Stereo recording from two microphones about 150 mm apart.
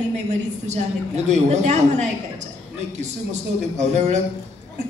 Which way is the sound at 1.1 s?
50° right (ahead or behind).